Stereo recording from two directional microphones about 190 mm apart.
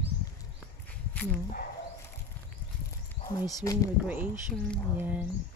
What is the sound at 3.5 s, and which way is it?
Speech, 20° left (ahead or behind).